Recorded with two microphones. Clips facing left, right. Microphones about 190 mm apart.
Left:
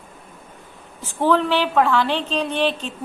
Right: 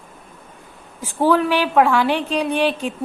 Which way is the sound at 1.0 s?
10° right (ahead or behind).